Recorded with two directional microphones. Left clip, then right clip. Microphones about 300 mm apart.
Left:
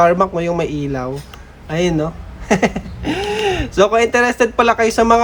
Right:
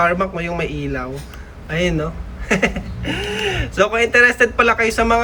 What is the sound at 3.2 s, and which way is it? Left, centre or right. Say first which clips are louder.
Speech: left 4 dB; centre.